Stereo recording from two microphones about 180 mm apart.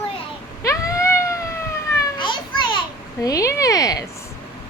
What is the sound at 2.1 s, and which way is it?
Children playing, 25° left (ahead or behind).